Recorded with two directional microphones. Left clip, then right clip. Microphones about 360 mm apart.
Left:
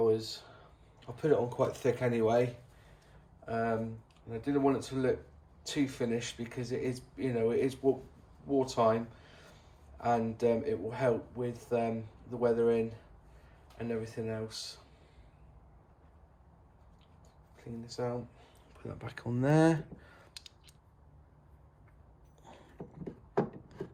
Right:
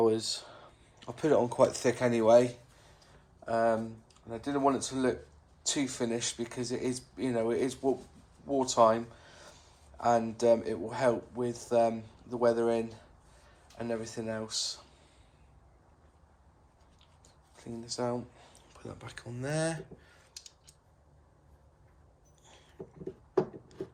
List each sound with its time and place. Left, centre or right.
0.0 s speech: centre
10.0 s speech: centre
17.9 s speech: centre